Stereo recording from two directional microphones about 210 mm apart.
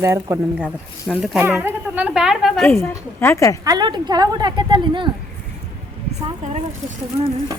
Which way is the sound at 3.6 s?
20° right (ahead or behind).